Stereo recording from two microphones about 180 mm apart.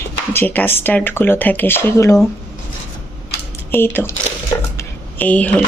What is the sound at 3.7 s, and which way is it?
Speech, 10° left (ahead or behind).